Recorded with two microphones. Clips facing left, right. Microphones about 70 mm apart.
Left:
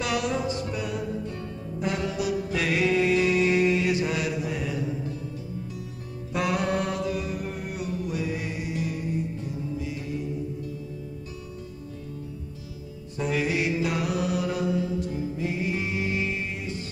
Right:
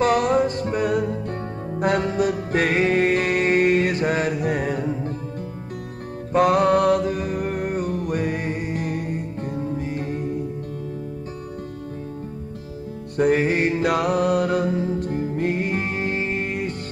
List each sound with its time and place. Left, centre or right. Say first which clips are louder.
0.0 s music: right 9 dB; right
6.3 s music: right 9 dB; right
13.2 s music: right 7 dB; right